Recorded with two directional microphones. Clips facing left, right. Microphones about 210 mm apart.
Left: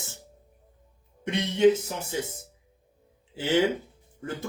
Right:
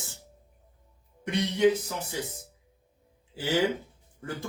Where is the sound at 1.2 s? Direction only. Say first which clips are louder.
Left 2 dB; 25° left (ahead or behind).